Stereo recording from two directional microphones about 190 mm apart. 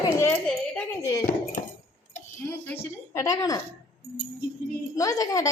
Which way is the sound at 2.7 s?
15° left (ahead or behind).